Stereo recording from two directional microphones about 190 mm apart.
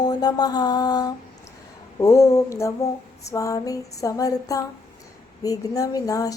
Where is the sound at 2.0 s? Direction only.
15° left (ahead or behind).